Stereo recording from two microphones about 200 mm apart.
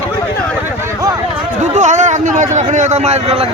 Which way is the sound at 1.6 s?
35° right (ahead or behind).